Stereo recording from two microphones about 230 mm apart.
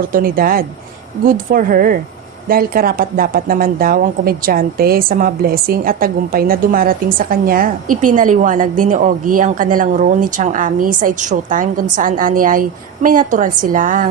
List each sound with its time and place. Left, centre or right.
0.1 s a woman's voice: right